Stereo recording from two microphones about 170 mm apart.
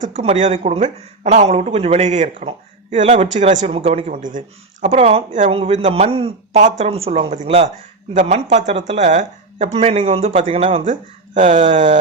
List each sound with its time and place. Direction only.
0.0 s speech: 40° right (ahead or behind)
11.3 s speech: 50° right (ahead or behind)